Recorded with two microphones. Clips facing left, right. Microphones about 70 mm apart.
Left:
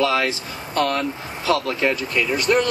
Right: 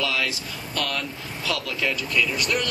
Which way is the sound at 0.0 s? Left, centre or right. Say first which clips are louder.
Left 7 dB; left.